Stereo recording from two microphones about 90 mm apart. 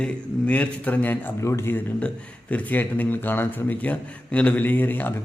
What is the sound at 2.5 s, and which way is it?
A man's voice, 15° left (ahead or behind).